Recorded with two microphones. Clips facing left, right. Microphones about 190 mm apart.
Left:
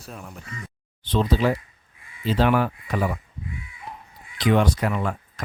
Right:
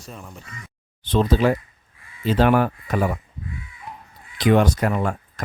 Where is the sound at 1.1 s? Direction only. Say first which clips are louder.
Right 3 dB; 50° right (ahead or behind).